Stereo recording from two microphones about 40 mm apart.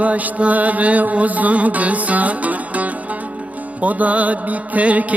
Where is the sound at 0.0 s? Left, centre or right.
Right.